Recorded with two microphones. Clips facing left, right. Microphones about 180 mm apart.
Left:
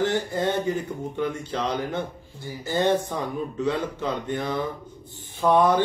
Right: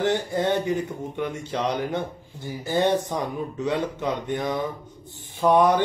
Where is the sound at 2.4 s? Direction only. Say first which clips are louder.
Right 1 dB; 15° right (ahead or behind).